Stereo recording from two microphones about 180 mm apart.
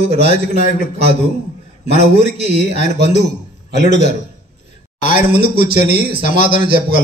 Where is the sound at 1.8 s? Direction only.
35° right (ahead or behind).